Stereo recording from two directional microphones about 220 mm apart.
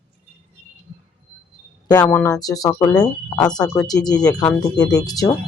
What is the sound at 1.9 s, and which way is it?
Speech, 15° left (ahead or behind).